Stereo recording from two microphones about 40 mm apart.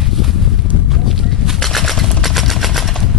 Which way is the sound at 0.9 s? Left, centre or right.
Centre.